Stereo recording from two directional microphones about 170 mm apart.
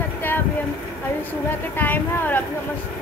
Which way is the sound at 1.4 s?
10° left (ahead or behind).